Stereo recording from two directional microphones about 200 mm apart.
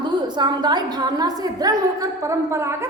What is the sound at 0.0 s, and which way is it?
A woman's voice, 20° right (ahead or behind).